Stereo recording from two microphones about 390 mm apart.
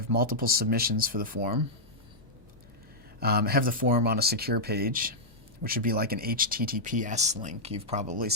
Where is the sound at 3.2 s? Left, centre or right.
Right.